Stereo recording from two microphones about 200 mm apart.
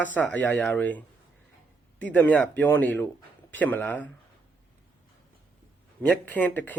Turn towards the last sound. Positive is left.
turn(degrees=10)  # may be behind; listen again after turning